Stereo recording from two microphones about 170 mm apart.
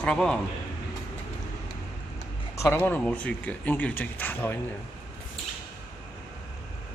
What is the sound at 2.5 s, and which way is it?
Speech, 15° left (ahead or behind).